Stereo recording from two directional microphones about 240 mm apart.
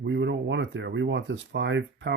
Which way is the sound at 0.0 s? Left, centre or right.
Right.